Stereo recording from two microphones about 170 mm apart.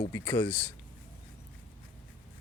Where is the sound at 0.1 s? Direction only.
10° left (ahead or behind).